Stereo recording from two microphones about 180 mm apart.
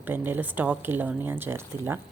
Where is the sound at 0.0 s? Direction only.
10° right (ahead or behind).